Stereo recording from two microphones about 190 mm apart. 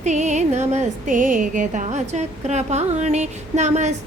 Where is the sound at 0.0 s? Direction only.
40° right (ahead or behind).